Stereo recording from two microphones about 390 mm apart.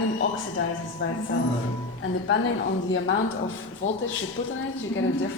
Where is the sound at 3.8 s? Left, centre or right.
Left.